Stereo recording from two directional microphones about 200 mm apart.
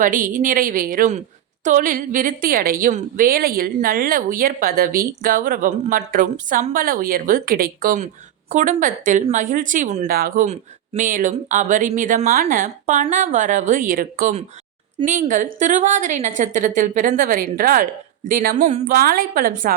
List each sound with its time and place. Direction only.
0.0 s a woman's voice: 40° right (ahead or behind)